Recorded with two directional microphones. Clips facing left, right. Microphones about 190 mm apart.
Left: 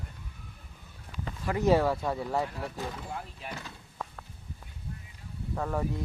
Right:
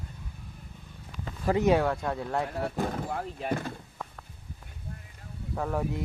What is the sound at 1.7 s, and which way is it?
Speech, centre (ahead or behind).